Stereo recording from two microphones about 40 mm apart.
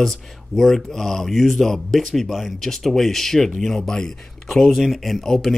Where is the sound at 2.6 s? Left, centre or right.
Centre.